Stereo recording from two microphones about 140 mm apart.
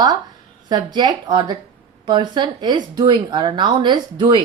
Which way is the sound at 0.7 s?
30° right (ahead or behind).